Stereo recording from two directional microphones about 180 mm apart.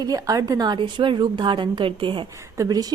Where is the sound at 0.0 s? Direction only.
20° right (ahead or behind).